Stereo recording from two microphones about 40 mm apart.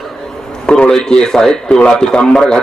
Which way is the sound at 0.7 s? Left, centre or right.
Centre.